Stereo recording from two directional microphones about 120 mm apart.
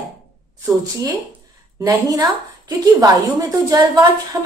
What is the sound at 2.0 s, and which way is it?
A woman's voice, 35° right (ahead or behind).